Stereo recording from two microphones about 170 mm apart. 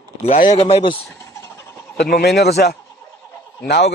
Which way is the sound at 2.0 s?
70° left (ahead or behind).